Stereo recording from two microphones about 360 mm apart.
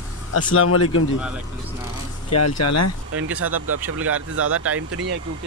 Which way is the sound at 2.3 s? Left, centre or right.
Left.